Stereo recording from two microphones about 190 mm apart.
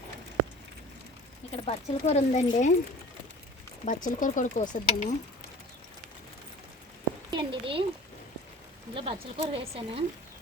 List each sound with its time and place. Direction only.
1.6 s speech: 35° left (ahead or behind)
3.8 s speech: 45° left (ahead or behind)
7.3 s a woman's voice: 25° right (ahead or behind)
9.0 s a woman's voice: 30° right (ahead or behind)